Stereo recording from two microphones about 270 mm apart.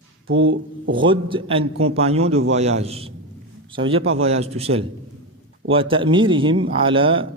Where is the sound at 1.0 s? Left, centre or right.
Centre.